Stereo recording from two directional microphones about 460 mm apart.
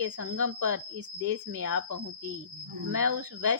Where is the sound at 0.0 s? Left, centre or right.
Right.